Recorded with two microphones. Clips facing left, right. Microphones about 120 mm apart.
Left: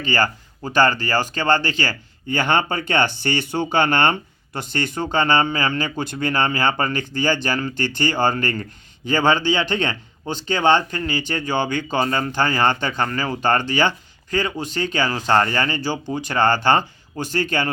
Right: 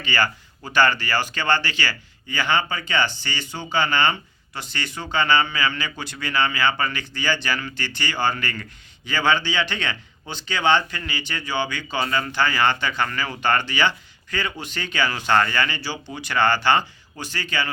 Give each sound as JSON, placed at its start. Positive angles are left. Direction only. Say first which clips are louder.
{"t": 0.0, "sound": "speech", "louder": "left 3 dB", "side_deg": 40}